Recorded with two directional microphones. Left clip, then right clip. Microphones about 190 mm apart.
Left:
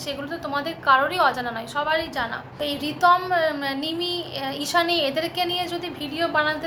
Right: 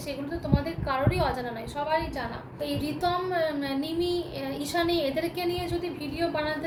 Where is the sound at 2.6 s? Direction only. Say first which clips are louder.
Left 9 dB; 20° right (ahead or behind).